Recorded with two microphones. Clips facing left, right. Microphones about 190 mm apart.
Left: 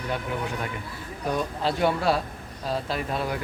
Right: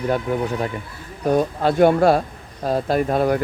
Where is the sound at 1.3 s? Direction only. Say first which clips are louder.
Right 8 dB; 50° right (ahead or behind).